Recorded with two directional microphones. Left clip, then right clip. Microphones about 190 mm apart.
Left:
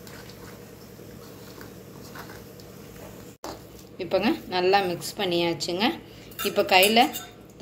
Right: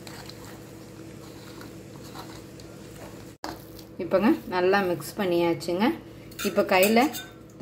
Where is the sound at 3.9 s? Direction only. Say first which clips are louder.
Right 2 dB; 40° right (ahead or behind).